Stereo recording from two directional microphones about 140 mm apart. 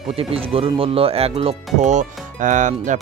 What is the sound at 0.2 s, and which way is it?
Speech, 40° right (ahead or behind).